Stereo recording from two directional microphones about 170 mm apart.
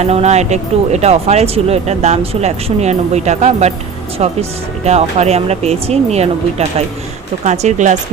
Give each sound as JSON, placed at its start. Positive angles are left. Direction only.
{"t": 0.0, "sound": "speech", "side_deg": -40}
{"t": 7.4, "sound": "speech", "side_deg": -45}